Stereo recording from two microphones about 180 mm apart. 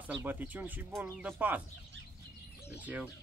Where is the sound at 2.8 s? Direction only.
10° right (ahead or behind).